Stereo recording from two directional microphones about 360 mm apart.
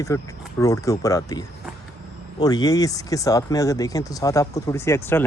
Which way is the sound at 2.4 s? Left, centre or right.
Centre.